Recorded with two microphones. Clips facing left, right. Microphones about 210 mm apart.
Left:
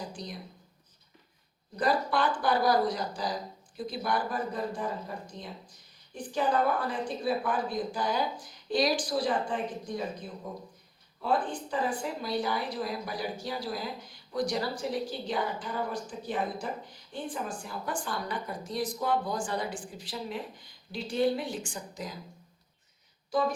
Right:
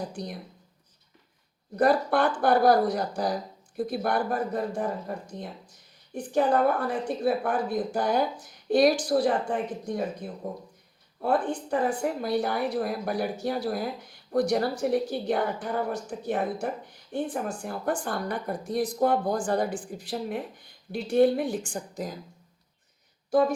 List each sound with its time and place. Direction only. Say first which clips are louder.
1.7 s a woman's voice: right 5 dB; 60° right (ahead or behind)
6.3 s a woman's voice: right 5 dB; 60° right (ahead or behind)